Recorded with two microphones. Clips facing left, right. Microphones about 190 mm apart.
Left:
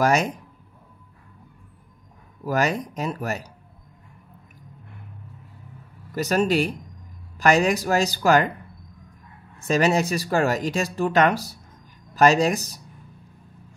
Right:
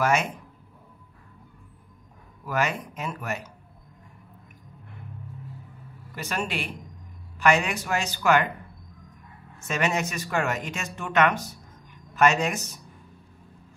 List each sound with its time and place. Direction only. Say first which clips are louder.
0.0 s speech: left 4 dB; 35° left (ahead or behind)
2.4 s speech: left 4 dB; 40° left (ahead or behind)
6.1 s speech: left 10 dB; 40° left (ahead or behind)
9.6 s speech: left 7 dB; 35° left (ahead or behind)